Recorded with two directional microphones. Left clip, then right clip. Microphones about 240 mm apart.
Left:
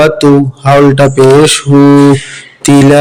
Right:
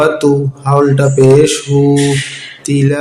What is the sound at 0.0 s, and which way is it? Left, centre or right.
Speech, left.